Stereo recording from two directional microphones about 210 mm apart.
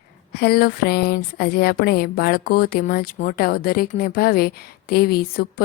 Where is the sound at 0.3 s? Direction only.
50° left (ahead or behind).